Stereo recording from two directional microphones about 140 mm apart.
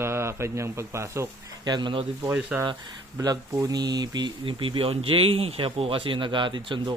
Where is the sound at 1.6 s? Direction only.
35° right (ahead or behind).